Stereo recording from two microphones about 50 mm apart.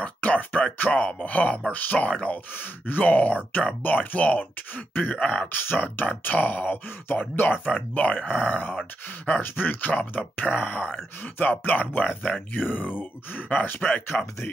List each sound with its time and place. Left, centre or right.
0.0 s speech: left
5.6 s speech: left
7.6 s speech: left